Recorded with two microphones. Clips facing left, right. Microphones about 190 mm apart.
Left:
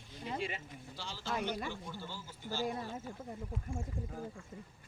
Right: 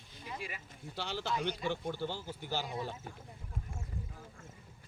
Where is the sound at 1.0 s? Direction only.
65° right (ahead or behind).